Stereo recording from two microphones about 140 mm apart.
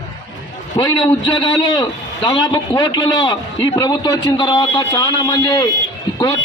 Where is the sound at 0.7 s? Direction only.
30° left (ahead or behind).